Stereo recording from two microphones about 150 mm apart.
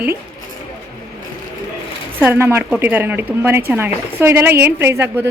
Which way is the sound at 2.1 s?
15° right (ahead or behind).